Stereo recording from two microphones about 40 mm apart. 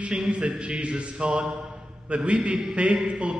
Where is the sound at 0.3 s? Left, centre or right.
Right.